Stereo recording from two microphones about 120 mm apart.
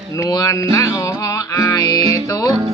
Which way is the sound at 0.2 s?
30° left (ahead or behind).